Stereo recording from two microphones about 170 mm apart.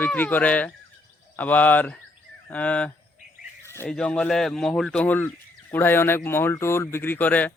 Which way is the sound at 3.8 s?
5° left (ahead or behind).